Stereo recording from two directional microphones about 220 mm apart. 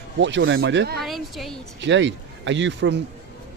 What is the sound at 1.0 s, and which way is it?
Speech, centre (ahead or behind).